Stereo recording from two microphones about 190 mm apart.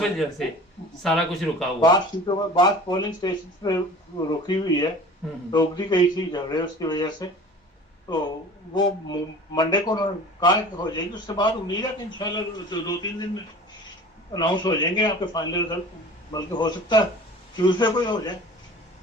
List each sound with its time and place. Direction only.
1.0 s speech: centre (ahead or behind)
1.8 s a man's voice: 20° left (ahead or behind)